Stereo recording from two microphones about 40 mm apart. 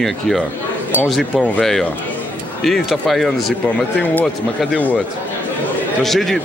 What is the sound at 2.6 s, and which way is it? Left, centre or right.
Speech, centre.